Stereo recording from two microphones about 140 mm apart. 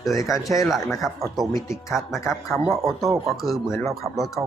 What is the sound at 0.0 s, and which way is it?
Speech, centre (ahead or behind).